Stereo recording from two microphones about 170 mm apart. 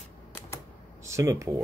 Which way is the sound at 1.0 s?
15° right (ahead or behind).